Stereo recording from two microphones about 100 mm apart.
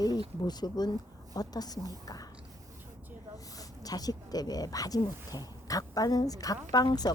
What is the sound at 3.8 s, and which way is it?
Speech, 40° left (ahead or behind).